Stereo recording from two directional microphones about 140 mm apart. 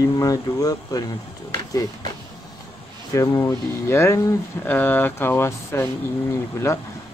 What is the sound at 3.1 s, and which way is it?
Speech, 20° left (ahead or behind).